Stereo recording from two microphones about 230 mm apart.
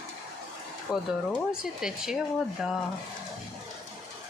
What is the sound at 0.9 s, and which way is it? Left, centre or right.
Speech, centre.